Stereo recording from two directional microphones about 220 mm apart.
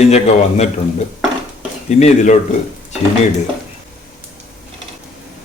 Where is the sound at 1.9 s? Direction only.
35° left (ahead or behind).